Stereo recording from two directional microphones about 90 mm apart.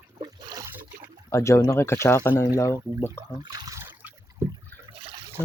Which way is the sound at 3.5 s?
45° right (ahead or behind).